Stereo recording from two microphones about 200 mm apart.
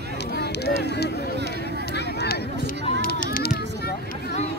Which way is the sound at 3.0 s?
45° left (ahead or behind).